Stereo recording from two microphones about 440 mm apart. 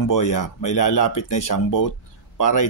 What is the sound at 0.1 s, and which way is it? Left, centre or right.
Speech, left.